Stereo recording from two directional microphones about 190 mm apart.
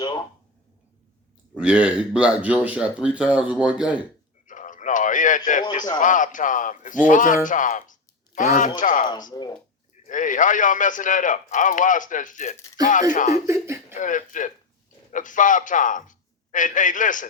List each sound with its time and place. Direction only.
0.0 s a sound: 25° left (ahead or behind)
1.5 s speech: 5° right (ahead or behind)
4.4 s radio: 45° left (ahead or behind)
6.0 s a man's voice: 40° left (ahead or behind)
9.3 s speech: 20° left (ahead or behind)
10.1 s a man's voice: 45° left (ahead or behind)
13.4 s speech: 15° right (ahead or behind)
13.9 s a man's voice: 40° left (ahead or behind)